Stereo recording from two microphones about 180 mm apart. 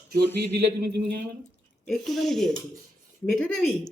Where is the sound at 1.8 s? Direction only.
Centre (ahead or behind).